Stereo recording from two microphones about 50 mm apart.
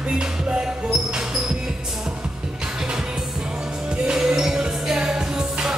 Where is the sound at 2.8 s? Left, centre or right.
Centre.